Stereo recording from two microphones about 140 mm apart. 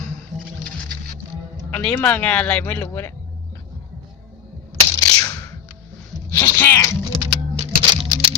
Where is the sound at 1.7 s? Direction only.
10° left (ahead or behind).